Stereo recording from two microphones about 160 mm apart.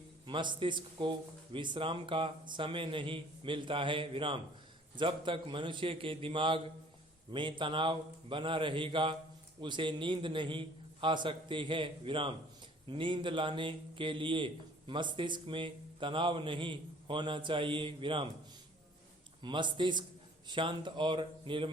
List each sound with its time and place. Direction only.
0.3 s a man's voice: 30° right (ahead or behind)
19.4 s a man's voice: 30° right (ahead or behind)